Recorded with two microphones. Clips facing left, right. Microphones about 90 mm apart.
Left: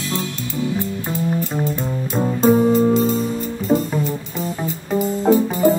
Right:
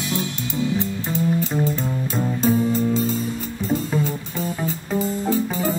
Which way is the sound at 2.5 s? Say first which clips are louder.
Left 5 dB; 45° left (ahead or behind).